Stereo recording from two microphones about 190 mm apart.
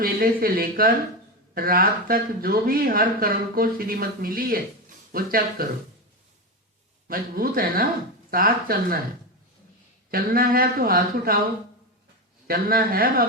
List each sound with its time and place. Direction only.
0.0 s speech: 50° right (ahead or behind)
7.1 s speech: 50° right (ahead or behind)
10.1 s speech: 50° right (ahead or behind)
12.5 s speech: 50° right (ahead or behind)